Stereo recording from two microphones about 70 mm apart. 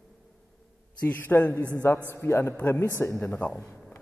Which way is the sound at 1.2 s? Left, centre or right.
Left.